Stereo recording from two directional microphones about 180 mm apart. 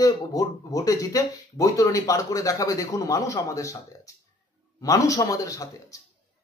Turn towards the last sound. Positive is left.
turn(degrees=20)  # may be behind; listen again after turning